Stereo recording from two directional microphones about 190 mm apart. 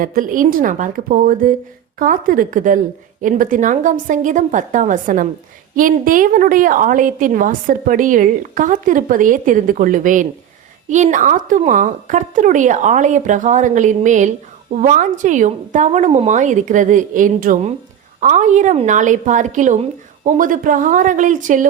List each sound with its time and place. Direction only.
0.0 s a woman's voice: 50° right (ahead or behind)